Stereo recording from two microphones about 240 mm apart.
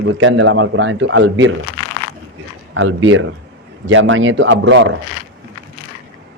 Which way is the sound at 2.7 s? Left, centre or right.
Right.